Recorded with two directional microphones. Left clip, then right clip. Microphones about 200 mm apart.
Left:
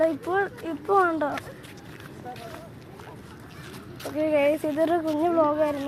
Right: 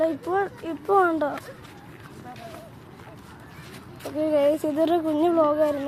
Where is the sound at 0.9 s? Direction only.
15° right (ahead or behind).